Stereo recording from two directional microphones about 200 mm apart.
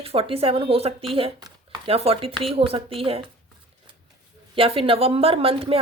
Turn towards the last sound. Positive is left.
turn(degrees=-30)  # may be behind; listen again after turning